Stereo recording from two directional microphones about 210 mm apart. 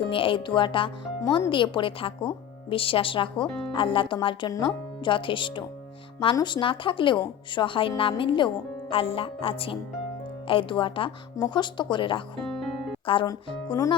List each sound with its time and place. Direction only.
0.1 s speech: 25° left (ahead or behind)